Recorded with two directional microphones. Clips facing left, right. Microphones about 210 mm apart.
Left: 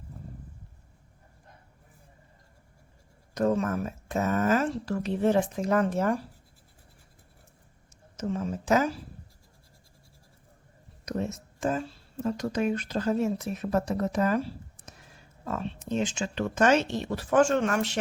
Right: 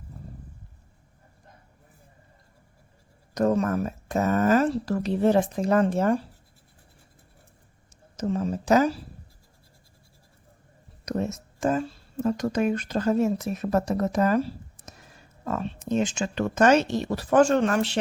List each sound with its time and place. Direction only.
3.3 s speech: 40° right (ahead or behind)
8.1 s speech: 35° right (ahead or behind)
11.0 s a sound: 45° right (ahead or behind)
11.3 s speech: 45° right (ahead or behind)